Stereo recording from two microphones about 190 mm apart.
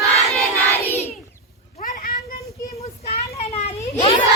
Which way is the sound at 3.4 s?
35° left (ahead or behind).